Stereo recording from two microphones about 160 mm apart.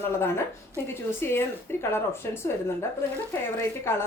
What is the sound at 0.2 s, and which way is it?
A woman's voice, 15° left (ahead or behind).